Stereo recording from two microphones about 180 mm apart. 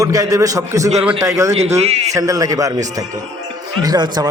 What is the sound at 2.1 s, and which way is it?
A man's voice, 20° right (ahead or behind).